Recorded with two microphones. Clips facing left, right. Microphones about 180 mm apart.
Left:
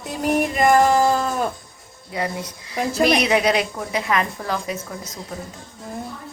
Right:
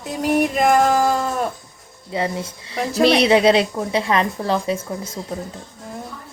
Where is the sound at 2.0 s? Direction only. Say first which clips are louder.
Right 3 dB; 25° right (ahead or behind).